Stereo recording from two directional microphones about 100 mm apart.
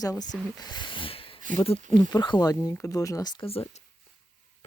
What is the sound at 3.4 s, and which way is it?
Speech, 75° left (ahead or behind).